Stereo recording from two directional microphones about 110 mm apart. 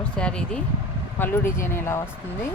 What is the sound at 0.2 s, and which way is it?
Speech, 10° left (ahead or behind).